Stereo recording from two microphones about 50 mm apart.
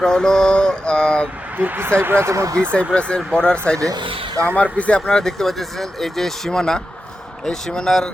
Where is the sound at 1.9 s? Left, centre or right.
Right.